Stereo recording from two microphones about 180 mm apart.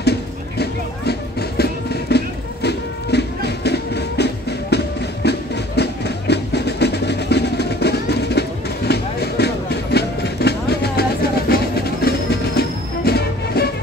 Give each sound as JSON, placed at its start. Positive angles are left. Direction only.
{"t": 0.0, "sound": "music", "side_deg": 65}